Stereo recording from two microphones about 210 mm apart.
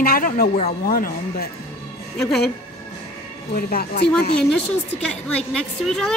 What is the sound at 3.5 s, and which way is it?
Speech, 45° left (ahead or behind).